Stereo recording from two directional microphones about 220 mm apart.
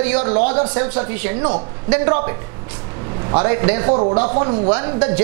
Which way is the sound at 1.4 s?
25° right (ahead or behind).